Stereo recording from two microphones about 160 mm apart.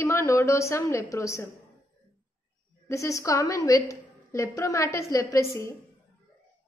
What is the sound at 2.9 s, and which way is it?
A woman's voice, 20° left (ahead or behind).